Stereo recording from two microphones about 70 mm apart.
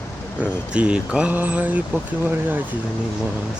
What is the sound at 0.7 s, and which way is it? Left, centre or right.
Speech, centre.